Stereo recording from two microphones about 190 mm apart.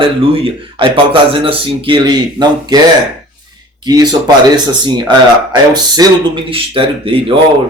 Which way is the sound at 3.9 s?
20° right (ahead or behind).